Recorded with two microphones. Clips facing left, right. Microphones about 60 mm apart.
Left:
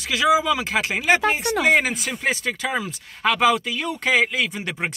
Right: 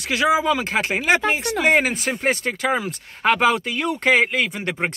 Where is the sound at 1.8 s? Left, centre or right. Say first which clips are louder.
Right 2 dB; right.